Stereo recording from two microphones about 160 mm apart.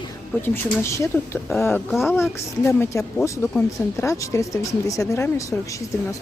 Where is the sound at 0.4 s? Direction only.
15° left (ahead or behind).